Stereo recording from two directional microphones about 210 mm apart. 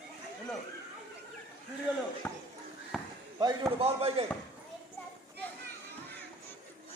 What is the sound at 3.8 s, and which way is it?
Speech, 30° right (ahead or behind).